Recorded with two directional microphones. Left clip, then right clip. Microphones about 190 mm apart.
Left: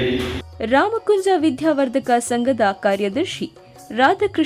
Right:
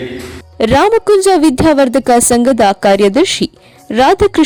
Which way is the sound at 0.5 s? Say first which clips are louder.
Right 9 dB; 40° right (ahead or behind).